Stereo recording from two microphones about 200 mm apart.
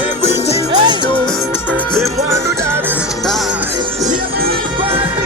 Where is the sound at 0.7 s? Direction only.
20° right (ahead or behind).